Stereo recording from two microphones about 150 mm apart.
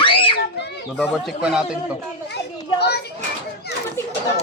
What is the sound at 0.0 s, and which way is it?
Children playing, 35° left (ahead or behind).